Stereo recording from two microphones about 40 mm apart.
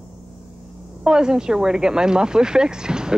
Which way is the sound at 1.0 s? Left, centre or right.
Centre.